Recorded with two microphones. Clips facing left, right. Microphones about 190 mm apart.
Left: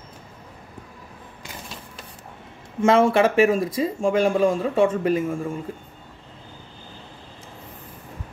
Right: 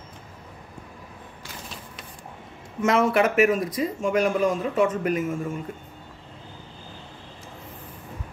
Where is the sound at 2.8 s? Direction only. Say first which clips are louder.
Left 4 dB; 30° left (ahead or behind).